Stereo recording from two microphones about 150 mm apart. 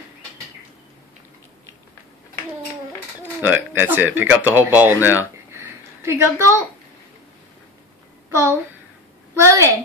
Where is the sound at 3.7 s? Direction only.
15° right (ahead or behind).